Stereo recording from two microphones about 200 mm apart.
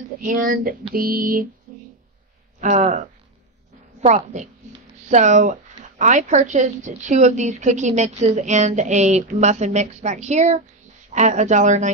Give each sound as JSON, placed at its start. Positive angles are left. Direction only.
{"t": 0.2, "sound": "speech", "side_deg": -45}
{"t": 2.6, "sound": "speech", "side_deg": -35}